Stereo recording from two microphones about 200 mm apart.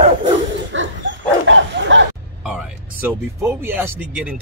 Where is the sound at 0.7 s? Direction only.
70° right (ahead or behind).